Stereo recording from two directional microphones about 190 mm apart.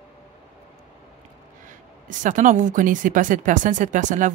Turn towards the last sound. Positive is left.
turn(degrees=-40)  # may be behind; listen again after turning